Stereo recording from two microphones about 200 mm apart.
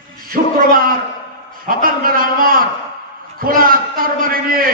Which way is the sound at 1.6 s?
45° right (ahead or behind).